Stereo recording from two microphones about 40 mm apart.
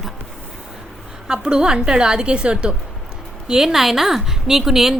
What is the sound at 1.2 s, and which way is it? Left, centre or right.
A woman's voice, centre.